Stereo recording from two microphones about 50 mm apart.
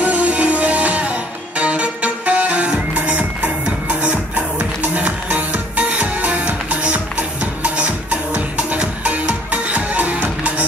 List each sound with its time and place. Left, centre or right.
0.0 s music: right